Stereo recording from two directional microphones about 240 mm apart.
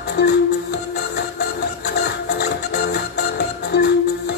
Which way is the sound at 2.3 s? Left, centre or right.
Left.